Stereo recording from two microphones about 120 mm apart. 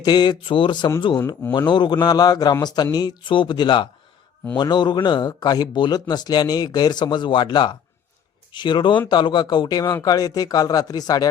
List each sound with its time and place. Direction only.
0.0 s speech: 35° left (ahead or behind)